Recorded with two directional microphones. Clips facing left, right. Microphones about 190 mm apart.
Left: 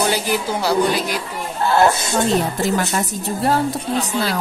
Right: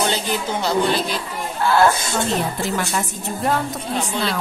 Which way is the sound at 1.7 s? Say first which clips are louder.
Left 1 dB; 20° left (ahead or behind).